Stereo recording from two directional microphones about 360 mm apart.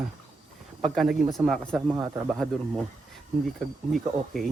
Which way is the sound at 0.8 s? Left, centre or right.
Centre.